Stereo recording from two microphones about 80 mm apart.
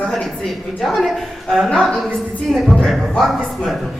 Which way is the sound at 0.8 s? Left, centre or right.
Centre.